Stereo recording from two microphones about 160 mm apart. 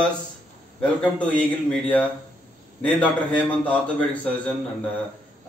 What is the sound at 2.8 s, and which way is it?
A man's voice, 10° left (ahead or behind).